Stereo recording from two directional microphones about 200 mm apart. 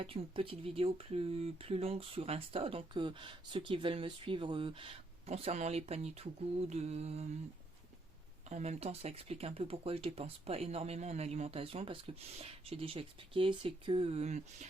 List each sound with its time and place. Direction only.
0.0 s speech: 25° right (ahead or behind)
8.4 s speech: 35° right (ahead or behind)